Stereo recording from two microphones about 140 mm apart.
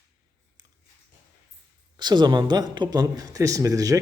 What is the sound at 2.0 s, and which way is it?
A man's voice, 30° right (ahead or behind).